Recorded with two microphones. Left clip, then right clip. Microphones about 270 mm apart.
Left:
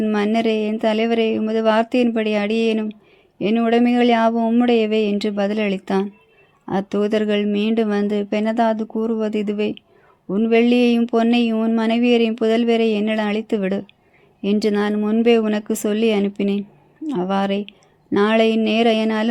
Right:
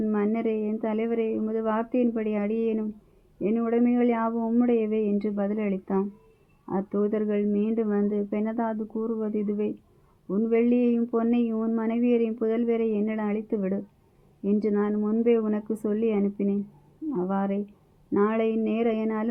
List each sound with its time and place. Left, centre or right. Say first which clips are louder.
0.0 s speech: left 8 dB; left